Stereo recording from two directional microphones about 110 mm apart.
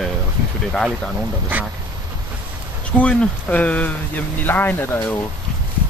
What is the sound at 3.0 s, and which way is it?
Speech, 15° left (ahead or behind).